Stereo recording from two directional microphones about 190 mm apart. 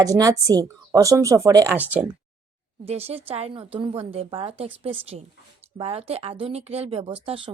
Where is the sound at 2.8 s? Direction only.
30° right (ahead or behind).